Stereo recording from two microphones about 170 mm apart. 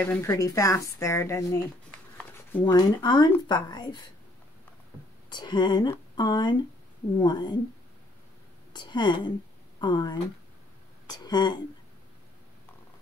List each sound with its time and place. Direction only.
0.0 s speech: 15° left (ahead or behind)
2.1 s a sound: 10° left (ahead or behind)
2.6 s speech: 25° left (ahead or behind)
5.3 s speech: 25° left (ahead or behind)
8.7 s speech: 25° left (ahead or behind)